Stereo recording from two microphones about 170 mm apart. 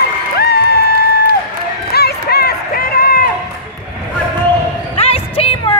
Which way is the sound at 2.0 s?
70° left (ahead or behind).